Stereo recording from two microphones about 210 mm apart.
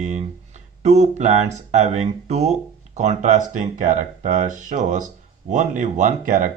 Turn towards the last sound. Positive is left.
turn(degrees=-40)  # may be behind; listen again after turning